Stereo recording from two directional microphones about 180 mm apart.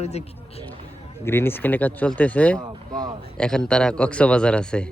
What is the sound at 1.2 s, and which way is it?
A man's voice, 10° left (ahead or behind).